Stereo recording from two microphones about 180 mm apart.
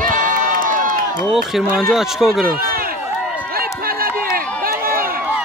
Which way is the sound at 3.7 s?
55° right (ahead or behind).